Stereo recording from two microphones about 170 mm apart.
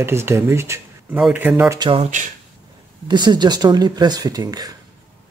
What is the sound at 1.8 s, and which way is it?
Speech, 35° right (ahead or behind).